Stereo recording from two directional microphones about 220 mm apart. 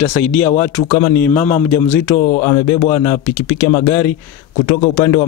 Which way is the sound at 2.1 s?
35° left (ahead or behind).